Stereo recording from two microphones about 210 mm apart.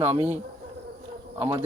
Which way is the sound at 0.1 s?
30° right (ahead or behind).